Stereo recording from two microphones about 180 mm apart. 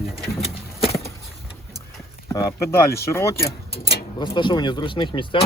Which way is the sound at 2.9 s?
15° left (ahead or behind).